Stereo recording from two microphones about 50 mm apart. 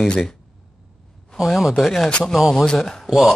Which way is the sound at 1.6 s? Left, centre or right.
Centre.